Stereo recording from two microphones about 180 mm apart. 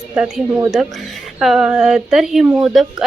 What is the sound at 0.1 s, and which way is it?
A woman's voice, 5° right (ahead or behind).